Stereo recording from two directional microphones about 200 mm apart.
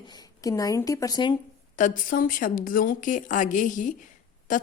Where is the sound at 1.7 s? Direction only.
40° left (ahead or behind).